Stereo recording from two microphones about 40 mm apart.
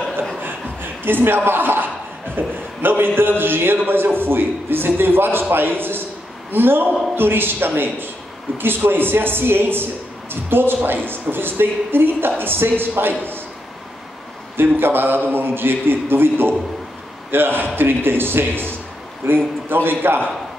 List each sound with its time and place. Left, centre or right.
1.0 s a man's voice: right
14.6 s a man's voice: right